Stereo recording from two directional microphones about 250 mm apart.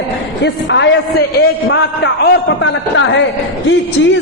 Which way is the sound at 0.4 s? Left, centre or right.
Left.